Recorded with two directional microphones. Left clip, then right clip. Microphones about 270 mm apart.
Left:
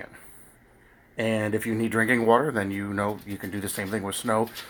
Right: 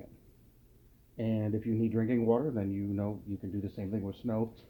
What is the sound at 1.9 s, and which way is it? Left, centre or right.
Speech, centre.